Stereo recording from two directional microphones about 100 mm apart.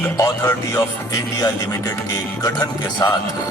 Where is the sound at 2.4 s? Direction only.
40° left (ahead or behind).